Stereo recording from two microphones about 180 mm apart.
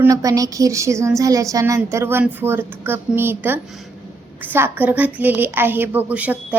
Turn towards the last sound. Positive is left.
turn(degrees=-10)  # may be behind; listen again after turning